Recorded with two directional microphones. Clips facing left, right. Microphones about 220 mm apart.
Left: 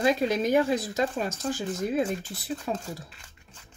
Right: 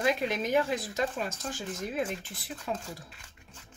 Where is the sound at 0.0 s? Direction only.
35° left (ahead or behind).